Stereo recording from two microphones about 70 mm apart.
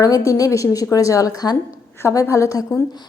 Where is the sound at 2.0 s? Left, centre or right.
Left.